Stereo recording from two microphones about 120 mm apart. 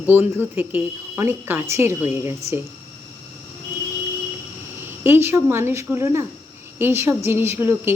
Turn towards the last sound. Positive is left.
turn(degrees=-20)  # may be behind; listen again after turning